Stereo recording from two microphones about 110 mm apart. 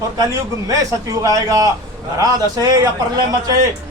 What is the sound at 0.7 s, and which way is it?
A man's voice, 30° right (ahead or behind).